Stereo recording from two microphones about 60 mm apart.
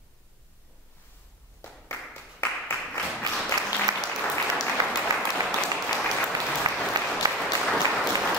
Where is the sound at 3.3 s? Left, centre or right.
Right.